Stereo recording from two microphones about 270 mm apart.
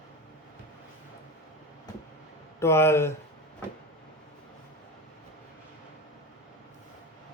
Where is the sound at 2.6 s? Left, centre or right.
Centre.